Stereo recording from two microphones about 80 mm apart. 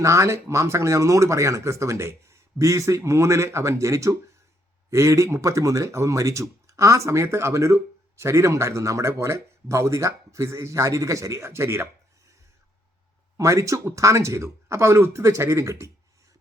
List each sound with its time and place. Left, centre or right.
0.0 s speech: right
13.3 s speech: right